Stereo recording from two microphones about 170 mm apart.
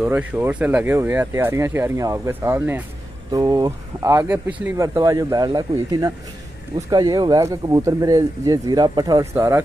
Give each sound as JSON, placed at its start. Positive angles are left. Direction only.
{"t": 0.0, "sound": "speech", "side_deg": -10}